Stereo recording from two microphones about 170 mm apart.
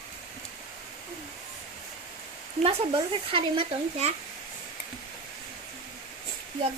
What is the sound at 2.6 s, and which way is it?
Speech, 35° right (ahead or behind).